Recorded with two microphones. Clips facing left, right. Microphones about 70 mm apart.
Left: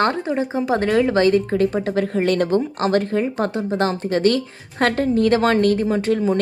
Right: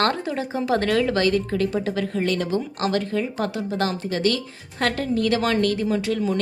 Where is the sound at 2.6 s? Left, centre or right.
Left.